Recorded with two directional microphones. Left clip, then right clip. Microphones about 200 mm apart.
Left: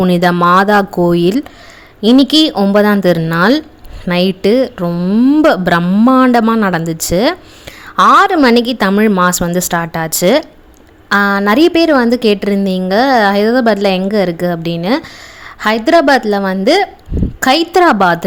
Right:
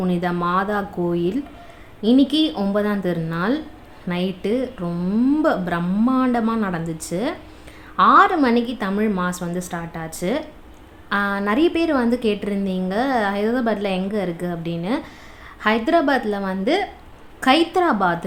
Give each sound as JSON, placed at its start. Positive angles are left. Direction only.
{"t": 0.0, "sound": "a woman's voice", "side_deg": 50}